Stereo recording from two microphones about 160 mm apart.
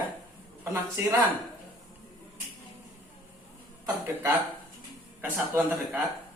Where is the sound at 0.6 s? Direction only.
15° right (ahead or behind).